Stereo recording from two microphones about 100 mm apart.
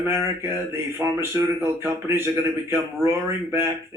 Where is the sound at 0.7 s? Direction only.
25° right (ahead or behind).